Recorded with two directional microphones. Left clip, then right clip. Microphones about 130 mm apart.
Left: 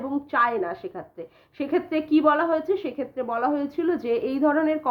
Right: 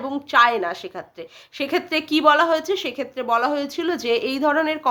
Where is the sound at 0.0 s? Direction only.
20° right (ahead or behind).